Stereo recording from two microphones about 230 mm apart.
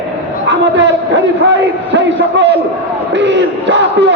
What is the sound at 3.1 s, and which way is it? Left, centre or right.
Battle cry, right.